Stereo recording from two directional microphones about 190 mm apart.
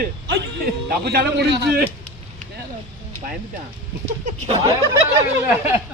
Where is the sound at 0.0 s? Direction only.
55° right (ahead or behind).